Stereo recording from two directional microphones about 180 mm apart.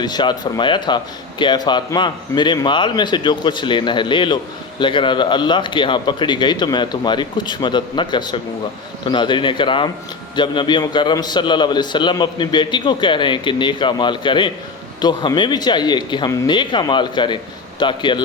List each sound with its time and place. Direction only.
0.0 s speech: 25° left (ahead or behind)